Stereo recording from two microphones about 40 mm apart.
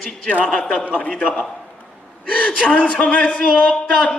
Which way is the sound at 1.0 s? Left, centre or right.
Left.